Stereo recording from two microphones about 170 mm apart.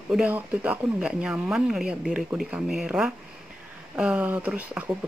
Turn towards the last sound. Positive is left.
turn(degrees=-10)  # may be behind; listen again after turning